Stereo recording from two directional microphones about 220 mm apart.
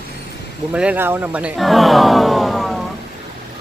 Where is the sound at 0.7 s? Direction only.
5° right (ahead or behind).